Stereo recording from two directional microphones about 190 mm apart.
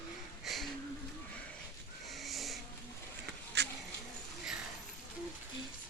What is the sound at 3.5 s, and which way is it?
Dog, 65° right (ahead or behind).